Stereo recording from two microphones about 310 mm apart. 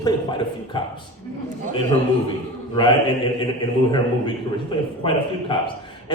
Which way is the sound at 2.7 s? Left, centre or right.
Centre.